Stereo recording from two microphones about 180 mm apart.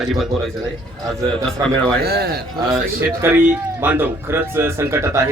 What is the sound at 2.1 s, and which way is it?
Speech, 60° right (ahead or behind).